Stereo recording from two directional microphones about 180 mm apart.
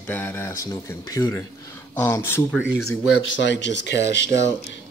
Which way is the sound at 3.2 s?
90° left.